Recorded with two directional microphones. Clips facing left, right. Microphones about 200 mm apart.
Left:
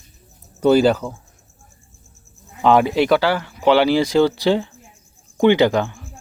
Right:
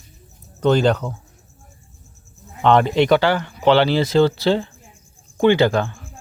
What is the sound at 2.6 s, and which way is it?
Speech, 5° left (ahead or behind).